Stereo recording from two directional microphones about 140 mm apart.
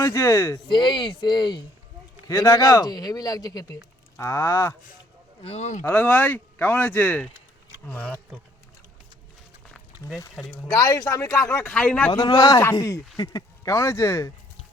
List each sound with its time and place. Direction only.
0.0 s a man's voice: 20° left (ahead or behind)
0.7 s a man's voice: 35° left (ahead or behind)
5.4 s speech: 50° left (ahead or behind)
5.8 s speech: 10° left (ahead or behind)
10.5 s a man's voice: 25° left (ahead or behind); by 12.1 s 10° left (ahead or behind)
12.1 s a man's voice: 30° left (ahead or behind)